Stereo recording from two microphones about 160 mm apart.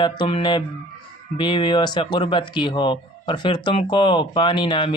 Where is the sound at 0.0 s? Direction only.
30° left (ahead or behind).